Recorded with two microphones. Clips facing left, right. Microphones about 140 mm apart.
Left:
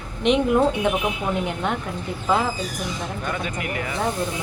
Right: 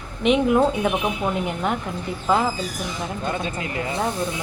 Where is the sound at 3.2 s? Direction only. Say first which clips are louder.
Right 1 dB; 25° right (ahead or behind).